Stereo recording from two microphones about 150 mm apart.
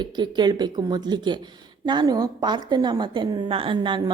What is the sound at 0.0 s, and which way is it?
A woman's voice, 30° right (ahead or behind).